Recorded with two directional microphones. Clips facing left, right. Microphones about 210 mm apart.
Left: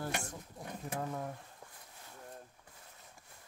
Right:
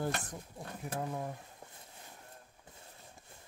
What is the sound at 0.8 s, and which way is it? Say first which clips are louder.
Speech: right 1 dB; 10° right (ahead or behind).